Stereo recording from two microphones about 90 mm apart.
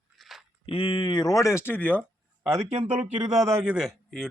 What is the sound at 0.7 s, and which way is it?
Speech, 85° left.